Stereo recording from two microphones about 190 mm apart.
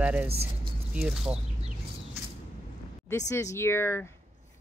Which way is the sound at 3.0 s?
15° left (ahead or behind).